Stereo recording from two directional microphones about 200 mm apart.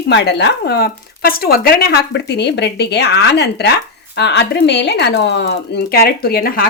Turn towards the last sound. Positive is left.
turn(degrees=50)  # may be behind; listen again after turning